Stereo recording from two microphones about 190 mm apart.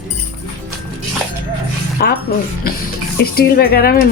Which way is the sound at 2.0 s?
50° left (ahead or behind).